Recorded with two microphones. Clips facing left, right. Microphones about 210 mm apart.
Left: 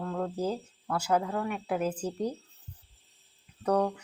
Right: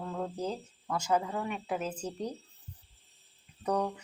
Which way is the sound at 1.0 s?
10° left (ahead or behind).